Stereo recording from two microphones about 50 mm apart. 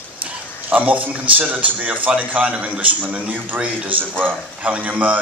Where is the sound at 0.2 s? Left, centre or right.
Right.